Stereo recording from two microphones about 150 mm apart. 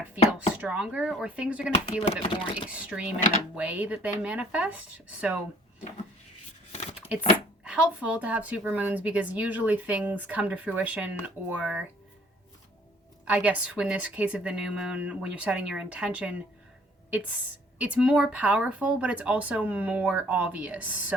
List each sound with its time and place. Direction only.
0.3 s speech: 10° right (ahead or behind)
1.7 s speech: 45° left (ahead or behind)
2.2 s speech: 35° left (ahead or behind)
2.6 s speech: 10° right (ahead or behind)
7.1 s speech: 5° right (ahead or behind)
13.2 s speech: 10° right (ahead or behind)
17.7 s speech: 10° right (ahead or behind)